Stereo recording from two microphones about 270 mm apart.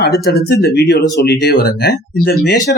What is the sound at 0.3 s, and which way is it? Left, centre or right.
Speech, left.